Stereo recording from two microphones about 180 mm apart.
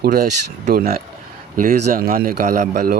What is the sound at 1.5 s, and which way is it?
Speech, 45° right (ahead or behind).